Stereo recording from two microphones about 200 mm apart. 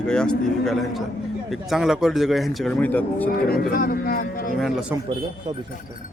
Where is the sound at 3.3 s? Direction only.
50° left (ahead or behind).